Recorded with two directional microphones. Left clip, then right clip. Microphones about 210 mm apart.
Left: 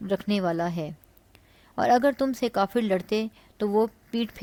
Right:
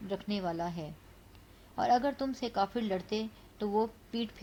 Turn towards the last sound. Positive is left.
turn(degrees=50)  # may be behind; listen again after turning